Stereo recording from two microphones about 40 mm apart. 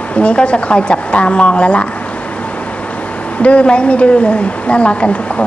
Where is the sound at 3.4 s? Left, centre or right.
Left.